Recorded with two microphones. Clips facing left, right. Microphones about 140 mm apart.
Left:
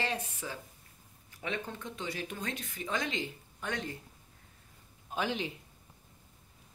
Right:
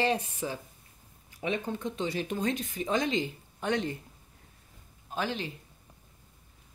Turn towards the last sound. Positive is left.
turn(degrees=10)  # may be behind; listen again after turning